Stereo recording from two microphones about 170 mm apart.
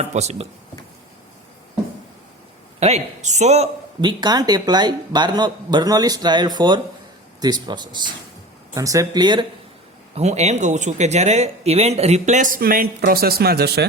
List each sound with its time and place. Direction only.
0.0 s speech: 40° right (ahead or behind)
2.8 s speech: 40° right (ahead or behind)
4.0 s speech: 25° right (ahead or behind)
10.2 s speech: 40° right (ahead or behind); by 13.8 s 70° right (ahead or behind)